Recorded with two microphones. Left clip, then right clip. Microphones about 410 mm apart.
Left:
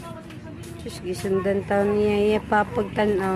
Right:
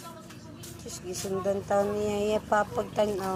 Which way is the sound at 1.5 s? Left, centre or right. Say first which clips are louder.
Left 3 dB; right.